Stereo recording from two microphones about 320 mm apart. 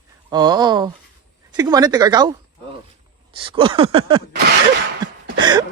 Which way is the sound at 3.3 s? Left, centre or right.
Centre.